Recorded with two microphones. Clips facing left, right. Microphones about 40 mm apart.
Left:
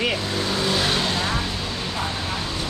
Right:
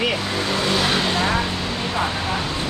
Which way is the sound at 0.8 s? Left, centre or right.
Centre.